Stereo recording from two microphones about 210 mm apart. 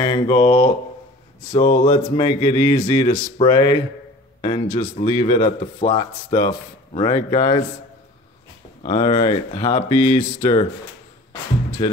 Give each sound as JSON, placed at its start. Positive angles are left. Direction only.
{"t": 0.0, "sound": "speech", "side_deg": 20}
{"t": 8.8, "sound": "speech", "side_deg": 25}
{"t": 11.8, "sound": "speech", "side_deg": 20}